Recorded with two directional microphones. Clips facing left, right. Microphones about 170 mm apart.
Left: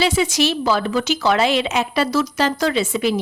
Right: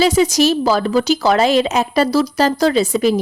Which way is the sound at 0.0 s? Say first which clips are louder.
Right 5 dB; 40° right (ahead or behind).